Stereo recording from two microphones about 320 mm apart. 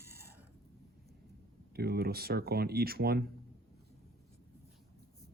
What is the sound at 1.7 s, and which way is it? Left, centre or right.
Speech, right.